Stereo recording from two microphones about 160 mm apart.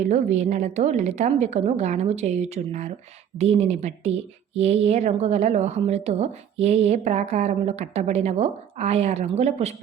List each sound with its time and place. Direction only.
0.0 s a woman's voice: 50° right (ahead or behind)